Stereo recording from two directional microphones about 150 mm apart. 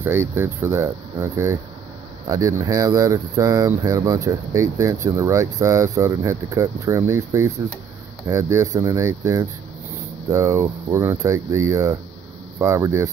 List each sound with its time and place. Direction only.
0.0 s speech: 15° right (ahead or behind)